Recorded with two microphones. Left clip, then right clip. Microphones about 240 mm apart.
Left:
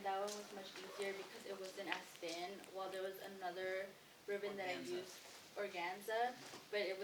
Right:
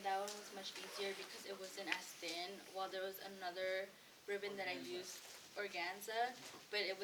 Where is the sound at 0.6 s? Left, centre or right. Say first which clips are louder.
Right 2 dB; right.